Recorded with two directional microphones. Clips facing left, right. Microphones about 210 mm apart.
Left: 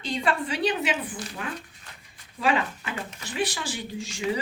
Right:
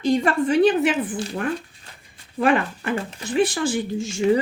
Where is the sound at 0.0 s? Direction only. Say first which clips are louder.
Right 8 dB; 45° right (ahead or behind).